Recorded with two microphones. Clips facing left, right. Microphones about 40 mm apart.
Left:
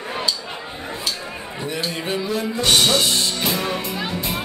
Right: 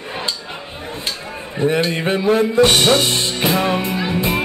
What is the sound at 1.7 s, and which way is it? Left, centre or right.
Music, right.